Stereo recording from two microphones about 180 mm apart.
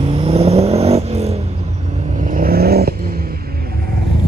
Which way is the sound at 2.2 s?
50° right (ahead or behind).